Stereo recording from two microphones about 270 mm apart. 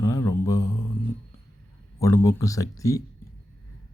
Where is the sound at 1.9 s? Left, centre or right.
Centre.